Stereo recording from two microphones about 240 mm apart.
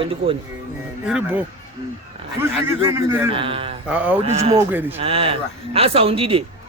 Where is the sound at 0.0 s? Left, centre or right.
Right.